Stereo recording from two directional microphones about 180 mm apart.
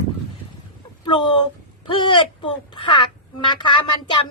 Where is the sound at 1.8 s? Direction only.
25° left (ahead or behind).